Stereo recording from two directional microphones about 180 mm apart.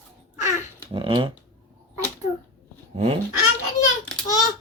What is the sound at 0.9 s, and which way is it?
Speech, 25° right (ahead or behind).